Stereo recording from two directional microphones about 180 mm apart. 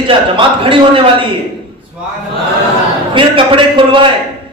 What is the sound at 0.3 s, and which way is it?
Speech, 30° right (ahead or behind).